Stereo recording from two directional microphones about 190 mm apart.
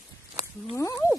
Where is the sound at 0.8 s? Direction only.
20° left (ahead or behind).